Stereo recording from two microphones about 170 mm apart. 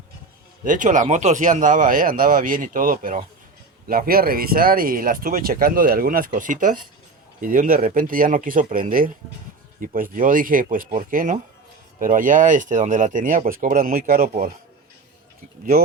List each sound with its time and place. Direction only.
0.6 s speech: 50° right (ahead or behind)